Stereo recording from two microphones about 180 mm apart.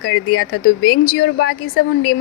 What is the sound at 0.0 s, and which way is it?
A woman's voice, 55° left (ahead or behind).